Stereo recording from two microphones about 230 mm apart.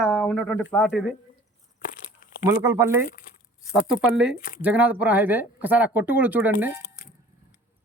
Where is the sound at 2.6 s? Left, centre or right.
Centre.